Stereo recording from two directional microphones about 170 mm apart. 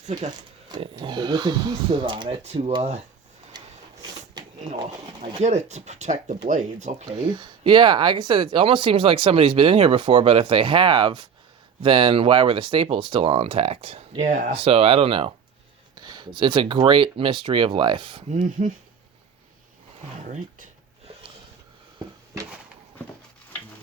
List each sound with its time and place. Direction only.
0.8 s speech: 25° right (ahead or behind)
5.2 s speech: 40° right (ahead or behind)
7.1 s speech: 25° right (ahead or behind)
14.3 s speech: 50° right (ahead or behind)
14.5 s speech: 35° right (ahead or behind)
20.2 s speech: 50° right (ahead or behind)